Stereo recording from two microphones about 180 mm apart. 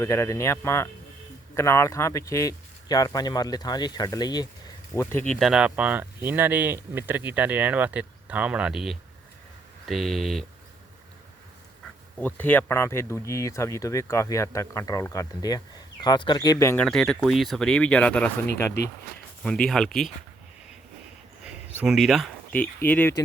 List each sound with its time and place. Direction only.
0.0 s speech: 15° left (ahead or behind)
4.9 s speech: 10° left (ahead or behind)
12.2 s speech: 10° left (ahead or behind)
16.8 s speech: 5° left (ahead or behind)
21.4 s a sound: 5° right (ahead or behind)
22.5 s speech: 10° left (ahead or behind)